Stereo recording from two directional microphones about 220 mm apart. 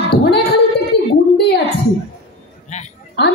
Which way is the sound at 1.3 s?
50° left (ahead or behind).